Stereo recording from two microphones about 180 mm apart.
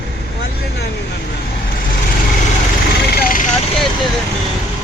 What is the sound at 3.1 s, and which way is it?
Speech, 55° left (ahead or behind).